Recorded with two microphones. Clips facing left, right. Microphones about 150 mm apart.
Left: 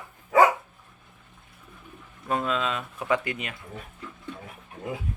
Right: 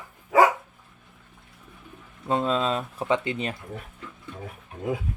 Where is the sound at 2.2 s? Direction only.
25° right (ahead or behind).